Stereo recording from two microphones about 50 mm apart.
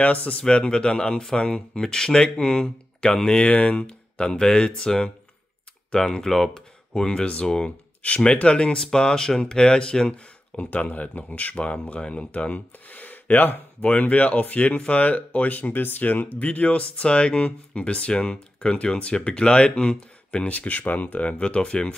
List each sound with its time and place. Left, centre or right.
0.0 s speech: left; by 6.6 s centre
7.0 s speech: centre
8.7 s speech: centre